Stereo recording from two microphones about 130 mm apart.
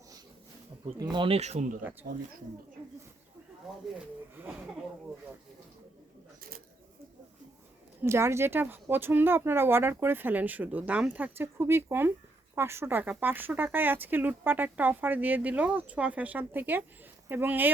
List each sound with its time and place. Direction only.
1.1 s speech: 40° right (ahead or behind)
1.4 s speech: 60° right (ahead or behind)
1.8 s speech: 15° right (ahead or behind)
8.0 s speech: 20° right (ahead or behind)